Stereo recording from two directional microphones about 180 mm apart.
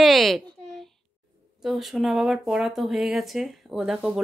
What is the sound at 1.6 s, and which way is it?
Speech, centre (ahead or behind).